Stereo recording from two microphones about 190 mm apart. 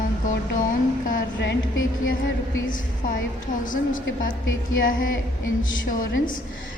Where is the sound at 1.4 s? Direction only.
80° left.